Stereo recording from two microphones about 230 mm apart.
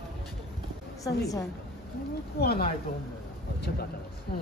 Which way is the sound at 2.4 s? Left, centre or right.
Left.